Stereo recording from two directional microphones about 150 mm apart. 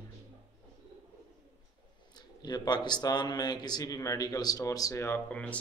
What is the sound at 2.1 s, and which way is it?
A man's voice, 25° left (ahead or behind).